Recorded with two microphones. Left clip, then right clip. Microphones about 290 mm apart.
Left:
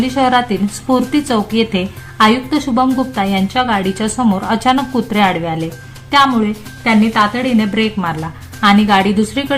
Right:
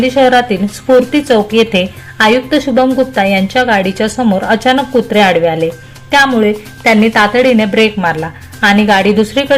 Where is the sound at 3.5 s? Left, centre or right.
Centre.